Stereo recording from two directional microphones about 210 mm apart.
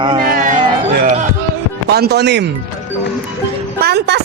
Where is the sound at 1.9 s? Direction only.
50° right (ahead or behind).